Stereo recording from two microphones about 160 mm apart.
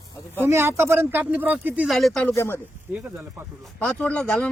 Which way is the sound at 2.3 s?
15° left (ahead or behind).